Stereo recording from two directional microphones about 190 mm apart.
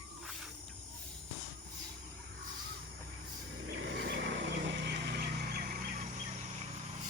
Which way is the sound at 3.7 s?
75° right (ahead or behind).